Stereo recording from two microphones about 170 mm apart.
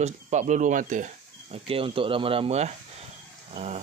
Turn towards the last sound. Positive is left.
turn(degrees=-40)  # may be behind; listen again after turning